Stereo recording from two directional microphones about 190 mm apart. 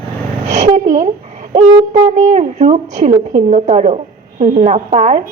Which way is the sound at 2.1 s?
40° right (ahead or behind).